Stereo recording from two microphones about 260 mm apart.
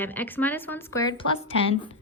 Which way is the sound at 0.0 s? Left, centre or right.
Centre.